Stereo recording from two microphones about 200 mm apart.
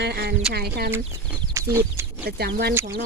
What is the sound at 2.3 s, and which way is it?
Speech, 50° right (ahead or behind).